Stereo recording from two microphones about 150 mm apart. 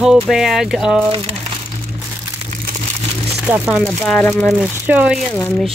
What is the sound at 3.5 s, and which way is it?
Speech, 10° right (ahead or behind).